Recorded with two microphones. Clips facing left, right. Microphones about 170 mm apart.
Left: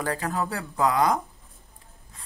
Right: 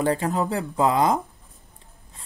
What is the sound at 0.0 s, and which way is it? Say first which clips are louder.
Speech: right 5 dB; 25° right (ahead or behind).